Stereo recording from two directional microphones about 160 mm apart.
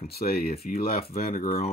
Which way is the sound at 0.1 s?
70° left (ahead or behind).